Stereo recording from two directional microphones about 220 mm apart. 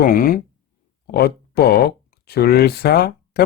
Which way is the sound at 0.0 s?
40° left (ahead or behind).